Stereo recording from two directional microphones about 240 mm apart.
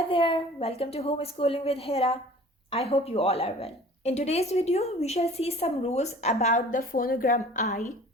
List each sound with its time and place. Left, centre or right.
0.1 s a woman's voice: left